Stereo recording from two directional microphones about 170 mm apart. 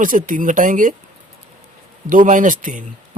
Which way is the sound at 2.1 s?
50° right (ahead or behind).